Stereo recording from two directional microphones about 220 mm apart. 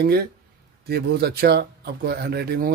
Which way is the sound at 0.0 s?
45° right (ahead or behind).